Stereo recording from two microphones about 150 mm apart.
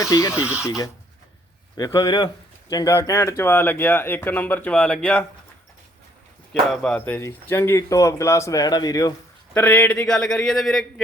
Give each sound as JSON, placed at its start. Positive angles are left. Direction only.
{"t": 0.0, "sound": "speech", "side_deg": 20}
{"t": 6.5, "sound": "speech", "side_deg": 5}
{"t": 9.6, "sound": "a man's voice", "side_deg": 10}